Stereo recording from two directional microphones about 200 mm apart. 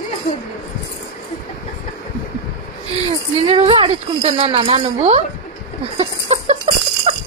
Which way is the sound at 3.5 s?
30° right (ahead or behind).